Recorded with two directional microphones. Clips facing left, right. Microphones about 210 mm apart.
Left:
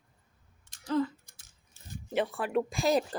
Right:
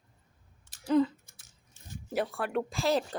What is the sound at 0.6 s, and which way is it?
Typing, 5° right (ahead or behind).